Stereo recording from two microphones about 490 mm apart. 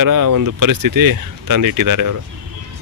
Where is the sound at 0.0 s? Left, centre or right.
Right.